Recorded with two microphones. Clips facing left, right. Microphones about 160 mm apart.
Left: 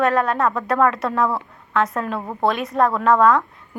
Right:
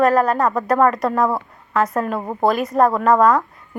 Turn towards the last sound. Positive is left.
turn(degrees=0)  # may be behind; listen again after turning